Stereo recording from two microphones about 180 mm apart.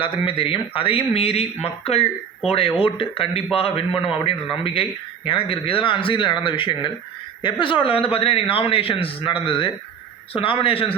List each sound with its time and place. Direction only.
0.0 s speech: 30° left (ahead or behind)